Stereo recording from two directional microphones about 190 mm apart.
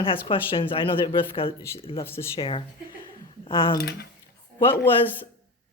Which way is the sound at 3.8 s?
60° left (ahead or behind).